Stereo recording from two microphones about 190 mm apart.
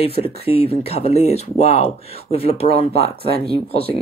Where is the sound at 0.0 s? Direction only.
30° left (ahead or behind).